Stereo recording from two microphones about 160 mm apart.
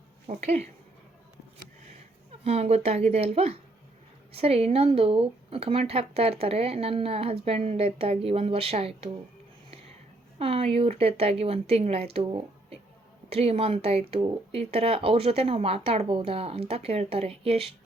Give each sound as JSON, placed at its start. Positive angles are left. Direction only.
{"t": 0.3, "sound": "speech", "side_deg": -45}
{"t": 2.4, "sound": "speech", "side_deg": -40}
{"t": 10.3, "sound": "speech", "side_deg": -35}